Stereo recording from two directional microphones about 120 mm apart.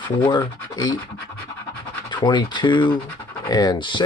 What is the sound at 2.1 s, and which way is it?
Speech, 40° left (ahead or behind).